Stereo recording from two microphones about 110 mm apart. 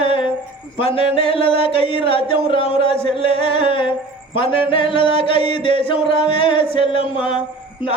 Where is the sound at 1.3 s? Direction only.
55° left (ahead or behind).